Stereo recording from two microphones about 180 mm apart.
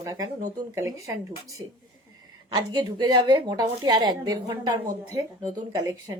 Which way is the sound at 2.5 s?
25° right (ahead or behind).